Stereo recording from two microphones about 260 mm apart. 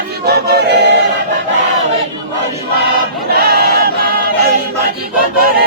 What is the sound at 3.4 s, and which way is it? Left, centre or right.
Choir, right.